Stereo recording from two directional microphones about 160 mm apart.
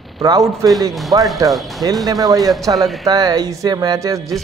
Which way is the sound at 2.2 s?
25° right (ahead or behind).